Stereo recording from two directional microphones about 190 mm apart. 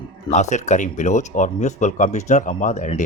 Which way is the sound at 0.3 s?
40° left (ahead or behind).